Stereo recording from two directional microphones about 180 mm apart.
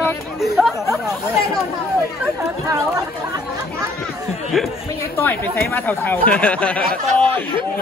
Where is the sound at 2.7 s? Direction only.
15° right (ahead or behind).